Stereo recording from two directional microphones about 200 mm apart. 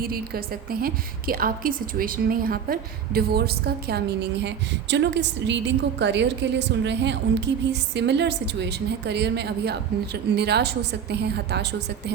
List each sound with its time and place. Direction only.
0.0 s a woman's voice: 50° right (ahead or behind)